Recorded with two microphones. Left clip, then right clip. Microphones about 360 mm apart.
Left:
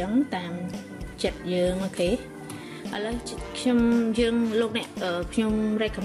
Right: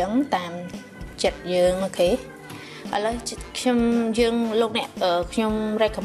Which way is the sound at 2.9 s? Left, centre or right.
Centre.